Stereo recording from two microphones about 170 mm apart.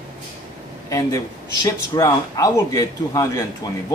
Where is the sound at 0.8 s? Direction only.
20° left (ahead or behind).